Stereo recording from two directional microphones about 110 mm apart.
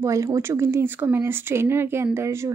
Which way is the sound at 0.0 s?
30° right (ahead or behind).